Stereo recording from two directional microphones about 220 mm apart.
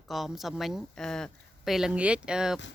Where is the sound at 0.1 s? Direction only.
Centre (ahead or behind).